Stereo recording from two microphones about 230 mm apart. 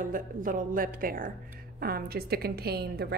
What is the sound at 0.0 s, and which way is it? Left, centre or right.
A woman's voice, right.